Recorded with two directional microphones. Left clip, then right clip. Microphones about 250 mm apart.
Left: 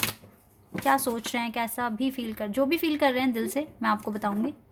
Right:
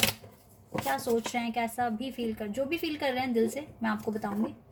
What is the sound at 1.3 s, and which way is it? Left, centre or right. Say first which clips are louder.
A woman's voice: left 2 dB; left.